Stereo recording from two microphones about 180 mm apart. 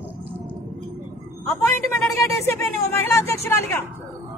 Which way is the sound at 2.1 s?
15° left (ahead or behind).